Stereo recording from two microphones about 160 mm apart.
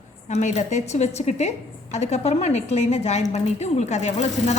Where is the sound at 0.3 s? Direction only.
45° left (ahead or behind).